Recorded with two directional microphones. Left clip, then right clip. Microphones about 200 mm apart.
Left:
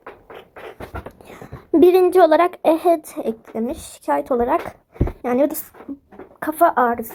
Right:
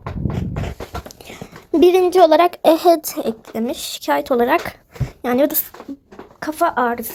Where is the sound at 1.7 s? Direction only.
10° right (ahead or behind).